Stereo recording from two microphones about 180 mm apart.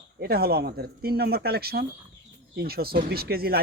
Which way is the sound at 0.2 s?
60° right (ahead or behind).